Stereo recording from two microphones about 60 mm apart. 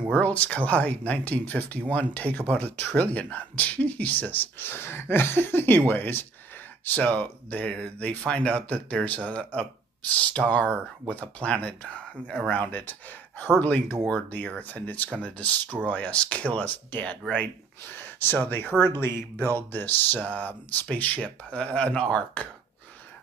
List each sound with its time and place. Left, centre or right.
0.1 s speech: left
13.6 s speech: left
19.3 s speech: left